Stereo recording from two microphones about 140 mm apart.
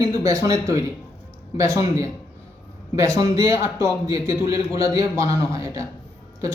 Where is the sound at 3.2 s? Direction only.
25° right (ahead or behind).